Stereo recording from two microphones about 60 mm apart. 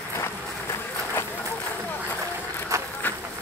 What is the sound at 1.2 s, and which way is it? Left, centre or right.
Run, left.